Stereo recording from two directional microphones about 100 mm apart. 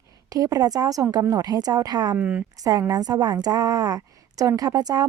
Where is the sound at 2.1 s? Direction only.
15° right (ahead or behind).